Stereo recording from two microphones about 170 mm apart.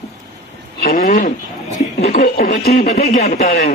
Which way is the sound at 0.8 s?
50° left (ahead or behind).